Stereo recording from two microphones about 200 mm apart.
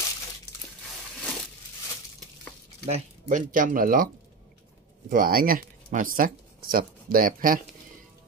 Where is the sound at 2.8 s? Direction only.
35° right (ahead or behind).